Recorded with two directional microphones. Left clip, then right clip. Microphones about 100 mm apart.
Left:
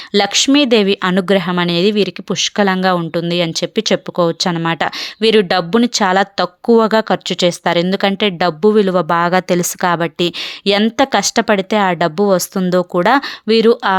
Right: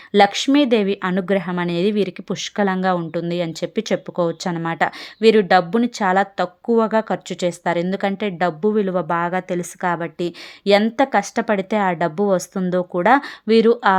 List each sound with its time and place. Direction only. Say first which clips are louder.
0.2 s speech: left 2 dB; 25° left (ahead or behind)
9.2 s a woman's voice: left 8 dB; 85° left
9.8 s speech: left 5 dB; 30° left (ahead or behind)